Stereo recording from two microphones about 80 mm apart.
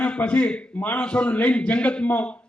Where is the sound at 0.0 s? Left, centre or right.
Centre.